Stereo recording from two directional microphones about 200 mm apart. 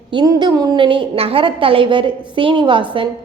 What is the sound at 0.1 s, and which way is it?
A woman's voice, 20° right (ahead or behind).